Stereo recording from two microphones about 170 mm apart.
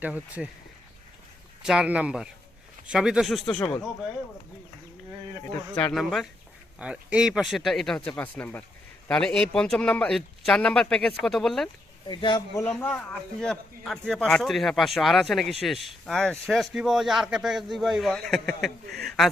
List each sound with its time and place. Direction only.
0.0 s speech: 10° right (ahead or behind)
1.6 s a man's voice: 5° right (ahead or behind)
5.5 s a man's voice: 10° left (ahead or behind)
12.0 s speech: 25° left (ahead or behind)
12.6 s a man's voice: 10° left (ahead or behind)